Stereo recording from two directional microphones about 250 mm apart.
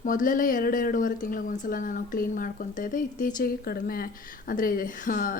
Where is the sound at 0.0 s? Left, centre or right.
Left.